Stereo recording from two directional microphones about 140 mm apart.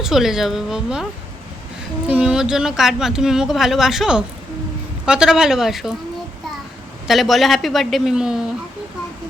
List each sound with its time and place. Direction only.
0.0 s speech: 5° right (ahead or behind)
2.0 s speech: 5° right (ahead or behind)
7.1 s speech: centre (ahead or behind)